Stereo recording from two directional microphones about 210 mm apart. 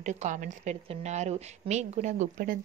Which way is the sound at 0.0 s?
35° right (ahead or behind).